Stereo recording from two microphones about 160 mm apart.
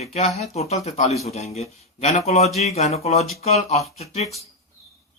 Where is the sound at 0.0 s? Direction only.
45° left (ahead or behind).